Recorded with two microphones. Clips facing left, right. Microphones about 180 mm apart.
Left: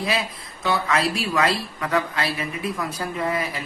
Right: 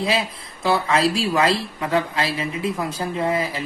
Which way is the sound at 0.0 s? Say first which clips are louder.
Right 3 dB; 25° right (ahead or behind).